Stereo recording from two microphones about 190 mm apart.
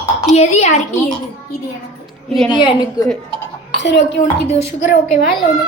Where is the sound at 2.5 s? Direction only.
20° left (ahead or behind).